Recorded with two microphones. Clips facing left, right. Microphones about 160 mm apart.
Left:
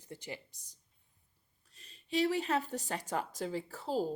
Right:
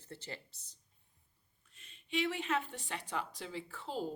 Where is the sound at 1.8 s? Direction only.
35° left (ahead or behind).